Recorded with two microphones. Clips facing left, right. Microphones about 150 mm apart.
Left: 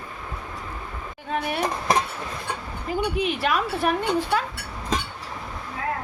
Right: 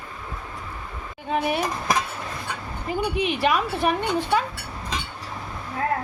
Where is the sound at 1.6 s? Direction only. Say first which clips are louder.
Left 1 dB; 30° left (ahead or behind).